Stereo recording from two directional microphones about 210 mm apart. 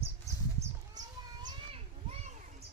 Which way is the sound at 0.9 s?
20° right (ahead or behind).